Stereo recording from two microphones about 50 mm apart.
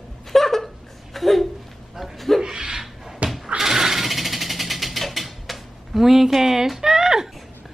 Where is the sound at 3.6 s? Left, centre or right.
Centre.